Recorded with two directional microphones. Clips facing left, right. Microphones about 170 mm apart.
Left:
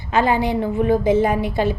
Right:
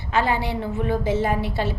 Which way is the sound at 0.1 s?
15° left (ahead or behind).